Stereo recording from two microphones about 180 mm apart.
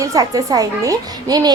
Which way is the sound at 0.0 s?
20° right (ahead or behind).